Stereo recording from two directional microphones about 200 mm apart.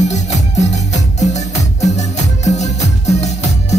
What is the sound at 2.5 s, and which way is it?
Music, 35° left (ahead or behind).